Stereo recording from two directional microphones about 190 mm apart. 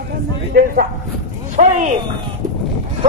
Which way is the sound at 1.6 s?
40° right (ahead or behind).